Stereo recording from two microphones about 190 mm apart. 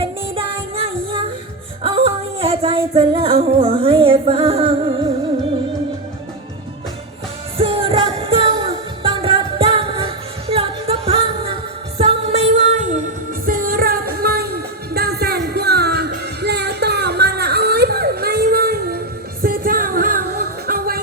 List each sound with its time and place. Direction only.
0.0 s music: 30° right (ahead or behind)
7.6 s music: 30° right (ahead or behind); by 21.0 s 50° right (ahead or behind)